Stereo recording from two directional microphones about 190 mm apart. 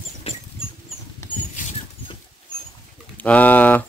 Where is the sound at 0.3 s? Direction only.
30° left (ahead or behind).